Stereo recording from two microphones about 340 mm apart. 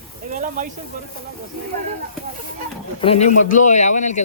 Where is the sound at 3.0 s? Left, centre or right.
Centre.